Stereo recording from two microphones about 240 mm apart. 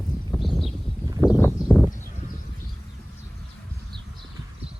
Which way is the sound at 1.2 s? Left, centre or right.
Centre.